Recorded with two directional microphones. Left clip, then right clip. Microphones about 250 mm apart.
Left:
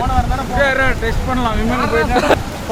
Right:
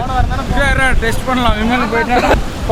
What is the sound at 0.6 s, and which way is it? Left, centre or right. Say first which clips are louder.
Speech: right 1 dB; right.